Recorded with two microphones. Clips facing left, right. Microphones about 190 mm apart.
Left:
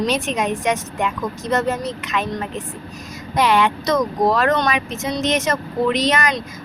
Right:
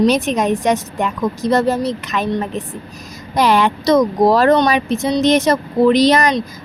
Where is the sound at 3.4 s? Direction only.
40° right (ahead or behind).